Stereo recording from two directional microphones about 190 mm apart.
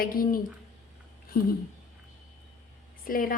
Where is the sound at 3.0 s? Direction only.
50° left (ahead or behind).